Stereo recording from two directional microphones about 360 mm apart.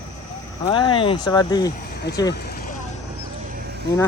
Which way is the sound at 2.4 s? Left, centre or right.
Left.